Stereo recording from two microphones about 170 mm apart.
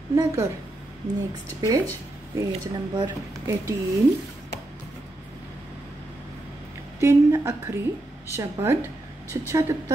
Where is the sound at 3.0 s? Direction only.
15° right (ahead or behind).